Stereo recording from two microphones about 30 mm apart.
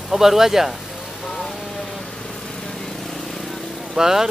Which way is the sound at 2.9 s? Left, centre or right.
Centre.